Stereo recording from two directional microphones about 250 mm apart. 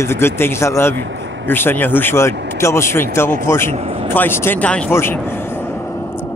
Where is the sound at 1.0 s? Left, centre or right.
Right.